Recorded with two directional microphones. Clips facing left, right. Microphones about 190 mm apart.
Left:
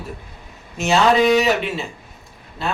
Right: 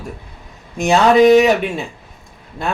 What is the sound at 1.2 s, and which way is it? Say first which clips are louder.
Speech: right 7 dB; 45° right (ahead or behind).